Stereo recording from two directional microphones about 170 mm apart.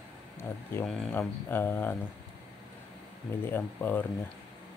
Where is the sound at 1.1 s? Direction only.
15° left (ahead or behind).